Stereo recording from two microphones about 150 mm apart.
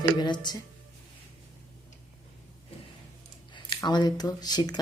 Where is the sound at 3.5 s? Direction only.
30° left (ahead or behind).